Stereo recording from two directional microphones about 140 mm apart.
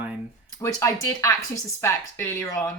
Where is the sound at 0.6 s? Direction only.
20° left (ahead or behind).